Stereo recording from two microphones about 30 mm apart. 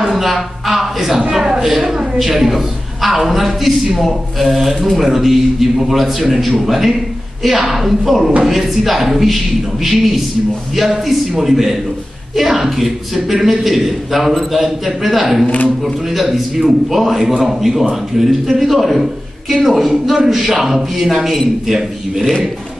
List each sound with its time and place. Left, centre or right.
0.0 s a man's voice: centre
15.4 s speech: left
15.8 s a woman's voice: centre